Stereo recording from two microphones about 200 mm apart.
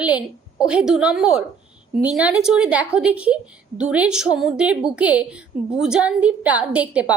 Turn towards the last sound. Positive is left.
turn(degrees=-5)  # may be behind; listen again after turning